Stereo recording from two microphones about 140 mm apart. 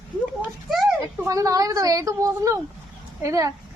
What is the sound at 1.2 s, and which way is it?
A woman's voice, 25° right (ahead or behind).